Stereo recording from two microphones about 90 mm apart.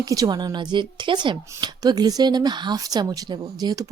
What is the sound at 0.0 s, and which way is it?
Speech, 45° right (ahead or behind).